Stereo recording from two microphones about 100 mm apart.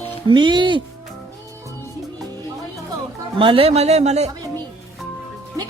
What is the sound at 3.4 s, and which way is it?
Speech, 65° right (ahead or behind).